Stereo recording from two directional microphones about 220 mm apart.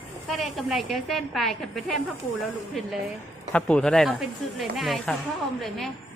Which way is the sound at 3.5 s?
5° left (ahead or behind).